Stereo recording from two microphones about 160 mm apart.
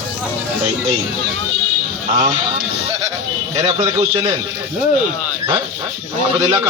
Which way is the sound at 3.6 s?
35° right (ahead or behind).